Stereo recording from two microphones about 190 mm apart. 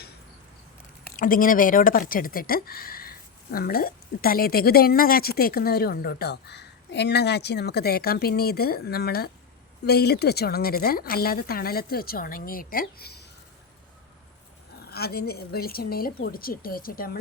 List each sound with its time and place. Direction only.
1.0 s speech: 45° left (ahead or behind)
14.8 s speech: 55° left (ahead or behind)